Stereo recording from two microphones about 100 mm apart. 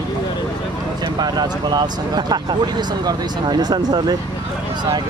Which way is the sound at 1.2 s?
45° right (ahead or behind).